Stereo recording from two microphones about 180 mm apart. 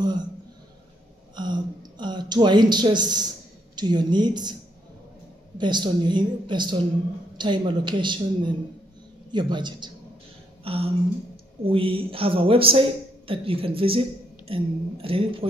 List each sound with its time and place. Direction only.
0.0 s speech: 25° right (ahead or behind)
1.3 s a woman's voice: 25° right (ahead or behind)
5.6 s a woman's voice: 25° right (ahead or behind)
10.6 s a sound: 30° right (ahead or behind)
11.6 s speech: 30° right (ahead or behind)